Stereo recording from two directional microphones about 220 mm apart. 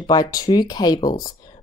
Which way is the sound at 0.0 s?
20° left (ahead or behind).